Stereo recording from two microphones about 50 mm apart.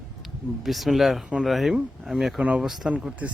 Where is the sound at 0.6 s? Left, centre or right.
Centre.